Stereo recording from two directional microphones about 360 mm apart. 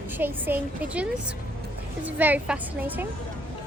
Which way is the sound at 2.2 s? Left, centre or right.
Centre.